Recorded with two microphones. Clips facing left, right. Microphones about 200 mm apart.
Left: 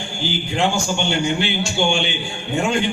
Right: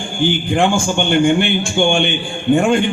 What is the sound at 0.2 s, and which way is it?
A man's voice, 55° right (ahead or behind).